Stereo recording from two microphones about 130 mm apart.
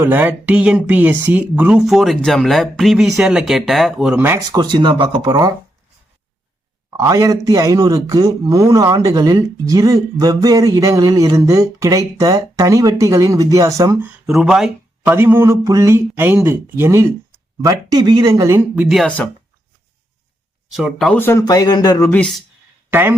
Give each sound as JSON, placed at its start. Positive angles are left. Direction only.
{"t": 0.0, "sound": "speech", "side_deg": -15}
{"t": 4.4, "sound": "speech", "side_deg": -30}
{"t": 6.9, "sound": "a man's voice", "side_deg": -25}
{"t": 14.3, "sound": "speech", "side_deg": 0}
{"t": 15.0, "sound": "a man's voice", "side_deg": -15}
{"t": 18.9, "sound": "speech", "side_deg": 0}
{"t": 20.7, "sound": "speech", "side_deg": -5}
{"t": 21.1, "sound": "speech", "side_deg": 15}
{"t": 21.4, "sound": "speech", "side_deg": 30}
{"t": 22.1, "sound": "speech", "side_deg": 10}
{"t": 22.9, "sound": "speech", "side_deg": -15}